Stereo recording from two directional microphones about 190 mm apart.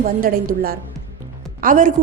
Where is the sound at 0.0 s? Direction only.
45° right (ahead or behind).